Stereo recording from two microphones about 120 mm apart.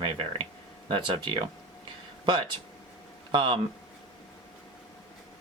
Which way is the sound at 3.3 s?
40° right (ahead or behind).